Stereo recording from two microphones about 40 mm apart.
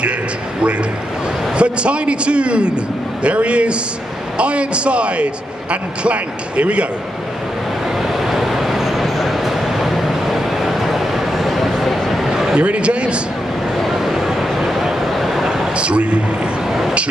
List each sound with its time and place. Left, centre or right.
1.5 s a man's voice: right
8.0 s vehicle: centre
12.5 s speech: right
13.7 s vehicle: centre
15.7 s speech: right
16.6 s vehicle: centre